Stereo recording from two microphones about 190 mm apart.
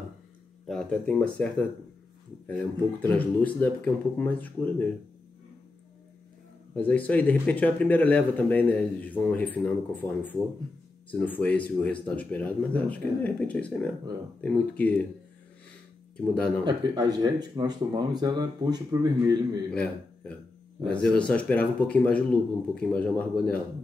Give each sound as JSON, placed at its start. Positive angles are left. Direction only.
{"t": 0.7, "sound": "speech", "side_deg": 5}
{"t": 6.7, "sound": "speech", "side_deg": 10}
{"t": 16.3, "sound": "speech", "side_deg": 5}
{"t": 16.6, "sound": "speech", "side_deg": -20}
{"t": 19.7, "sound": "speech", "side_deg": 5}